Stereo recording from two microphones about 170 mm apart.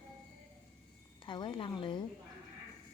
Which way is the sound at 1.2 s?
25° left (ahead or behind).